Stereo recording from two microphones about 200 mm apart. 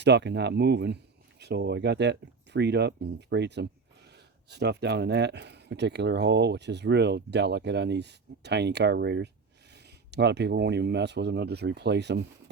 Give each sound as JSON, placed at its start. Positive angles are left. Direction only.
{"t": 0.0, "sound": "speech", "side_deg": -60}